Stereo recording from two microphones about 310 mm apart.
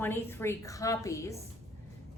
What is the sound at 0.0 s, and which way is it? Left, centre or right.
A woman's voice, centre.